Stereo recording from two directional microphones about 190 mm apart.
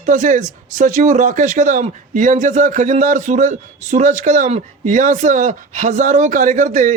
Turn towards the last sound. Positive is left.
turn(degrees=-40)  # may be behind; listen again after turning